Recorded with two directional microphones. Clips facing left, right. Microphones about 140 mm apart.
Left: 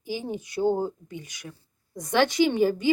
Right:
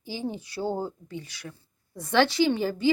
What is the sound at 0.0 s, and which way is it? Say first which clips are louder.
A woman's voice: left 1 dB; 15° left (ahead or behind).